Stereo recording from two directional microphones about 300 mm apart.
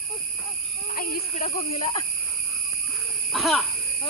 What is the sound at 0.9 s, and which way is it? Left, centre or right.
Speech, left.